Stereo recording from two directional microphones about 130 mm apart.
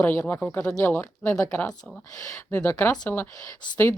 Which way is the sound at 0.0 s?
15° left (ahead or behind).